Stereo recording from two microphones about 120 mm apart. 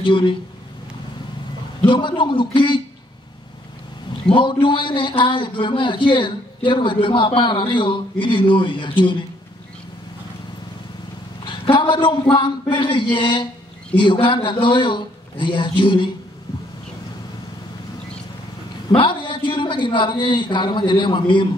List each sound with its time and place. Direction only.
0.0 s a man's voice: 45° left (ahead or behind)
1.8 s a man's voice: 40° left (ahead or behind)
4.1 s a man's voice: 40° left (ahead or behind)
11.4 s a man's voice: 40° left (ahead or behind)
18.9 s a man's voice: 40° left (ahead or behind)